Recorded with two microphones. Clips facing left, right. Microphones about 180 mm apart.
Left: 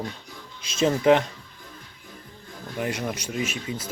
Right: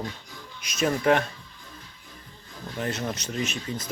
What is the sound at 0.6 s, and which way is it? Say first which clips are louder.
Speech: left 3 dB; 25° left (ahead or behind).